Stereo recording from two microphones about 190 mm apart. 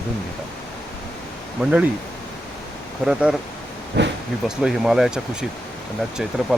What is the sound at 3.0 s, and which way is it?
Speech, centre (ahead or behind).